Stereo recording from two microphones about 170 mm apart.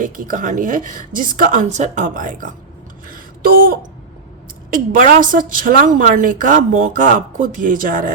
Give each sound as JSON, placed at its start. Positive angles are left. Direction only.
{"t": 0.0, "sound": "a woman's voice", "side_deg": -50}
{"t": 3.1, "sound": "a sound", "side_deg": -55}
{"t": 4.7, "sound": "a woman's voice", "side_deg": -50}